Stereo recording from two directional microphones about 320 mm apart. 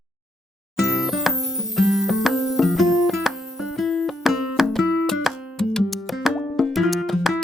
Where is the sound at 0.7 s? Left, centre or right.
Centre.